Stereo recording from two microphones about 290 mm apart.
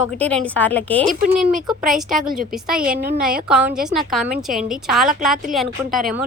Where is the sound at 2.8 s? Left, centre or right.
Right.